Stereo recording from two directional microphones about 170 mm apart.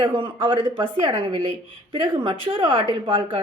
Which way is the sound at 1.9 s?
30° right (ahead or behind).